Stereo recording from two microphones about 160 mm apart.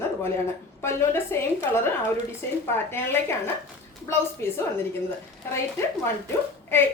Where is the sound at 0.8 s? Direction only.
15° left (ahead or behind).